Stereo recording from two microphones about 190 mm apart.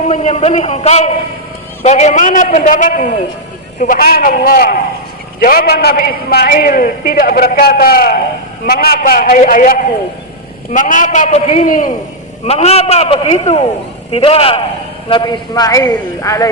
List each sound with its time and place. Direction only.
0.1 s a man's voice: 35° left (ahead or behind); by 16.5 s 15° left (ahead or behind)